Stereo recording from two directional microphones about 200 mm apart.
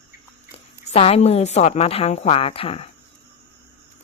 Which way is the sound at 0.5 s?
30° left (ahead or behind).